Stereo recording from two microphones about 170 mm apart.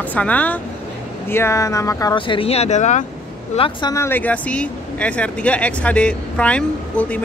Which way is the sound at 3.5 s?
30° left (ahead or behind).